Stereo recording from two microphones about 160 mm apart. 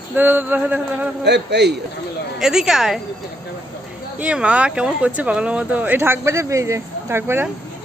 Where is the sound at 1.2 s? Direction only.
90° right.